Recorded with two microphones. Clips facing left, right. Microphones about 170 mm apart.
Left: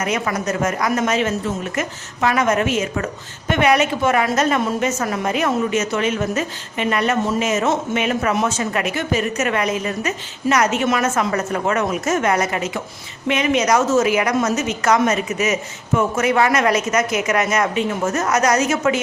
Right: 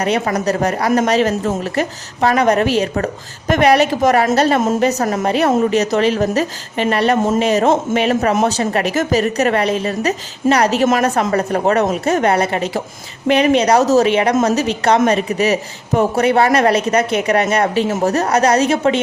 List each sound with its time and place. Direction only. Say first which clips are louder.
0.0 s speech: right 5 dB; 35° right (ahead or behind)